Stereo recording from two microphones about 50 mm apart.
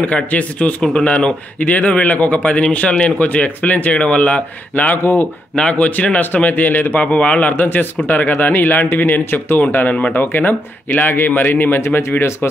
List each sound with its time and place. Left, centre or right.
0.0 s a man's voice: left
4.9 s speech: left
5.6 s a man's voice: left
10.2 s a man's voice: left